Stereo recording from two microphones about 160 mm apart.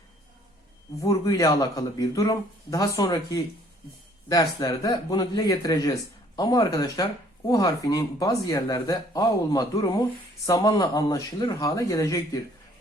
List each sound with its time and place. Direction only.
1.0 s speech: 20° left (ahead or behind)